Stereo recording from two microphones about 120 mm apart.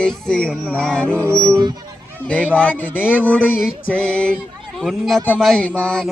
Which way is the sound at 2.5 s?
10° left (ahead or behind).